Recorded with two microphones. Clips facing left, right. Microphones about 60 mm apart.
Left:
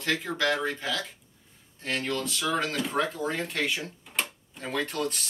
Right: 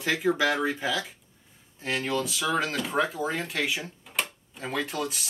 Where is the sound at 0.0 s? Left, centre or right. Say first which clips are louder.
Right 3 dB; centre.